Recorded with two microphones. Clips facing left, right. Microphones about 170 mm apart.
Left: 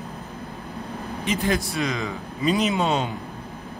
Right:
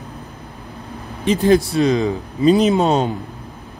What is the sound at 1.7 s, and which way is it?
Speech, 35° right (ahead or behind).